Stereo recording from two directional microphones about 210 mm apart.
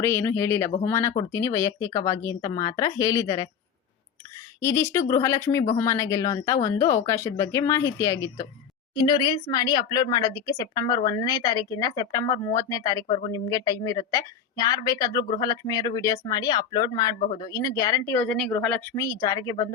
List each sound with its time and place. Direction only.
0.0 s speech: 10° left (ahead or behind)
4.6 s a woman's voice: 15° left (ahead or behind)